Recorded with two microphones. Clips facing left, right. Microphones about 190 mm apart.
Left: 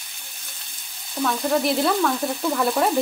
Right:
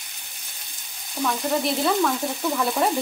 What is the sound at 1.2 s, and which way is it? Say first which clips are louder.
Stir: left 2 dB; centre (ahead or behind).